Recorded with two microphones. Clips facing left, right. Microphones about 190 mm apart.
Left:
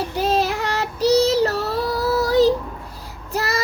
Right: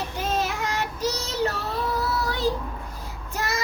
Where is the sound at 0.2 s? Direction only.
35° left (ahead or behind).